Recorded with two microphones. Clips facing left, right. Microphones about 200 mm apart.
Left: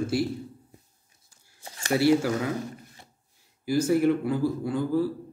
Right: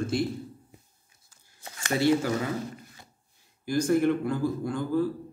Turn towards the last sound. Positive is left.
turn(degrees=10)  # may be behind; listen again after turning